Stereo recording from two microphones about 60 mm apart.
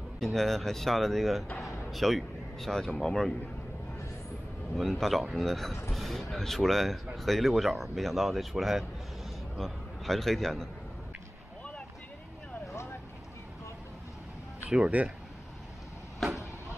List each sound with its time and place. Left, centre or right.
0.2 s a man's voice: centre
4.7 s a man's voice: centre
14.7 s speech: centre